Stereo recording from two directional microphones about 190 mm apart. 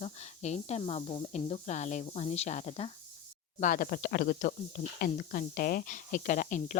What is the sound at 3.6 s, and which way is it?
Speech, 45° left (ahead or behind).